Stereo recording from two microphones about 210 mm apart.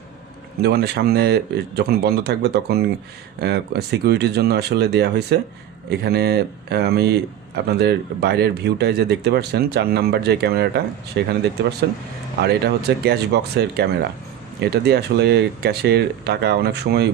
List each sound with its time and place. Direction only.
0.6 s speech: 50° right (ahead or behind)
12.4 s speech: 50° right (ahead or behind)